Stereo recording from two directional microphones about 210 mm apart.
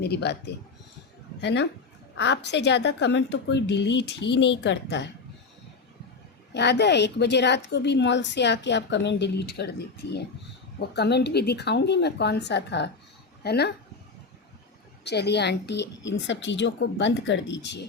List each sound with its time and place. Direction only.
0.0 s a woman's voice: 50° left (ahead or behind)
6.5 s a woman's voice: 55° left (ahead or behind)
15.0 s a woman's voice: 50° left (ahead or behind)